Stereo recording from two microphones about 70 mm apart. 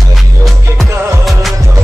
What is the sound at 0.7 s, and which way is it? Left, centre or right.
Music, centre.